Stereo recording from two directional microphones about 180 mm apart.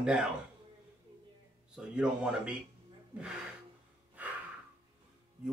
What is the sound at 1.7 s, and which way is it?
Speech, 5° right (ahead or behind).